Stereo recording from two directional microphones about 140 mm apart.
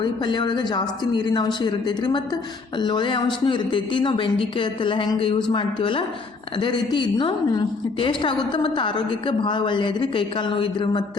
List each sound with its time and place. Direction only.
0.0 s a woman's voice: 30° left (ahead or behind)